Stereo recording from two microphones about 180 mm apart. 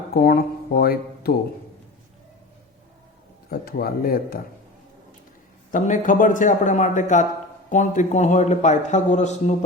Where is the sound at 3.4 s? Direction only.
55° left (ahead or behind).